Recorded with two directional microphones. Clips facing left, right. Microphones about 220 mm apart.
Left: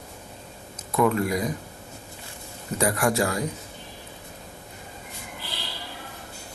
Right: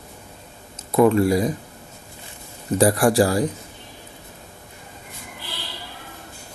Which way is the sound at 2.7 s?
35° right (ahead or behind).